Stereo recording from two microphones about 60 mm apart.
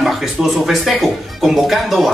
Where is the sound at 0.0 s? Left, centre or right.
Centre.